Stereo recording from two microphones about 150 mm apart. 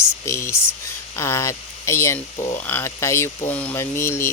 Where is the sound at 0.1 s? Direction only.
20° left (ahead or behind).